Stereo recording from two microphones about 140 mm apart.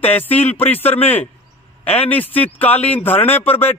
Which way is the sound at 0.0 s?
10° left (ahead or behind).